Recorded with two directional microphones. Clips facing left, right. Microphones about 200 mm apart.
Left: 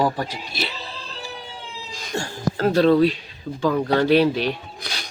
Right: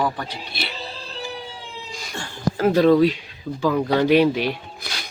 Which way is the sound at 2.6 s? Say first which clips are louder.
Right 1 dB; 10° right (ahead or behind).